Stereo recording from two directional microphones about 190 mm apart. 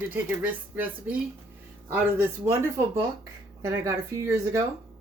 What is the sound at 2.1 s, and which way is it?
Speech, 15° right (ahead or behind).